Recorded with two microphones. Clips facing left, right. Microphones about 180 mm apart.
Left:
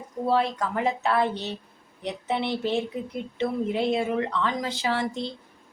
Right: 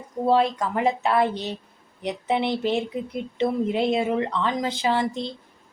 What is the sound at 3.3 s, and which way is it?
A woman's voice, 20° right (ahead or behind).